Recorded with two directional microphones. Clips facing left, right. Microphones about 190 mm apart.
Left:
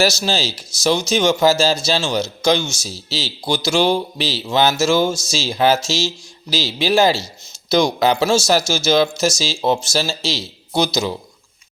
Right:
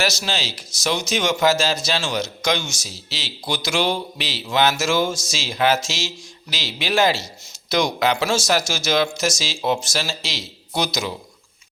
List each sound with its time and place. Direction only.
0.0 s speech: 30° left (ahead or behind)